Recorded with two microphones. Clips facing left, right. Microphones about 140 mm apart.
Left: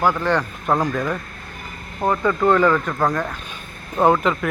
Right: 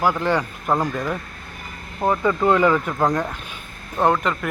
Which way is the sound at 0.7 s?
Centre (ahead or behind).